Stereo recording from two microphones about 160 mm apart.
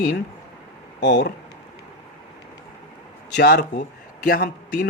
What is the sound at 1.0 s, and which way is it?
Speech, 90° left.